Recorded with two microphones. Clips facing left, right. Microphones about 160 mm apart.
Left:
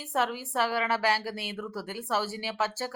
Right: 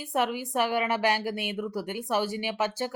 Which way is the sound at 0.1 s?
15° right (ahead or behind).